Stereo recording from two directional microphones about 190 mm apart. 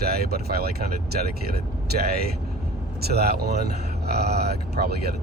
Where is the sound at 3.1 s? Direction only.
55° right (ahead or behind).